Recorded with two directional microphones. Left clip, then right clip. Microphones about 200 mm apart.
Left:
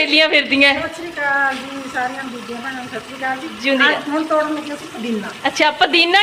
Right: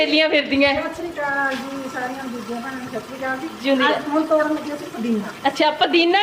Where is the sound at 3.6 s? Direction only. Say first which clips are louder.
Left 2 dB; 25° left (ahead or behind).